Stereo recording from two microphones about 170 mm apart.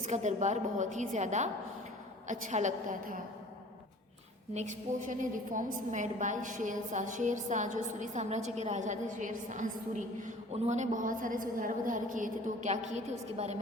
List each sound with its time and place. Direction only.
0.0 s a woman's voice: 45° right (ahead or behind)
4.5 s a woman's voice: 45° right (ahead or behind)